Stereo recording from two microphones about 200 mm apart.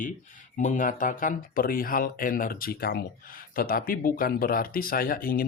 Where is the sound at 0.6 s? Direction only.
40° left (ahead or behind).